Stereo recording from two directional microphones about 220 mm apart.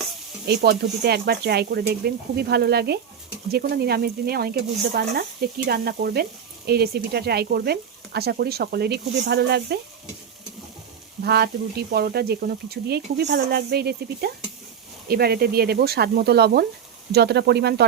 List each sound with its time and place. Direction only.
0.4 s speech: 45° right (ahead or behind)
11.2 s speech: 45° right (ahead or behind)